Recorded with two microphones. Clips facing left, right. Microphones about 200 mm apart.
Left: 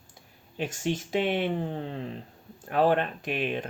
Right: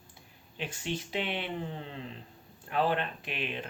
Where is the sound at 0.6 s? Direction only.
45° left (ahead or behind).